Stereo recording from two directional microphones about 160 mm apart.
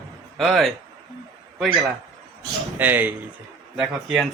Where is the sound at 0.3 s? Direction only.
Centre (ahead or behind).